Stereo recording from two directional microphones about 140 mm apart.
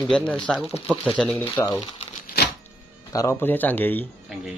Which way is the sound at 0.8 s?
10° right (ahead or behind).